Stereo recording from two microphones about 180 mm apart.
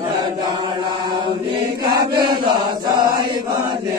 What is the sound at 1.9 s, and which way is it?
Chant, 25° right (ahead or behind).